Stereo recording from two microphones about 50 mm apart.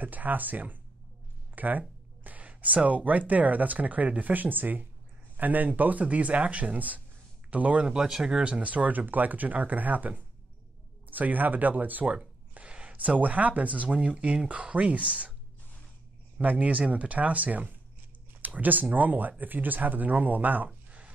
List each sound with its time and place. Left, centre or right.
0.0 s speech: right
7.9 s speech: centre
8.5 s speech: right
12.5 s speech: right
16.3 s speech: right